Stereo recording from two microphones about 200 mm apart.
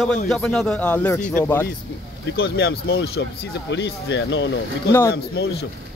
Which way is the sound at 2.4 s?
55° left (ahead or behind).